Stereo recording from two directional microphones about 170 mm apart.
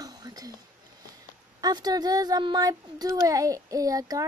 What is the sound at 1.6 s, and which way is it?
Speech, 25° right (ahead or behind).